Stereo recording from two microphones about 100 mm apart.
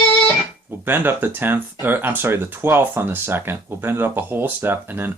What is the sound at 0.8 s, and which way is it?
Speech, 20° right (ahead or behind).